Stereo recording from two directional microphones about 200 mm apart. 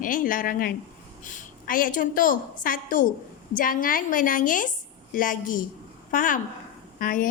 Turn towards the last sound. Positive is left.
turn(degrees=45)  # may be behind; listen again after turning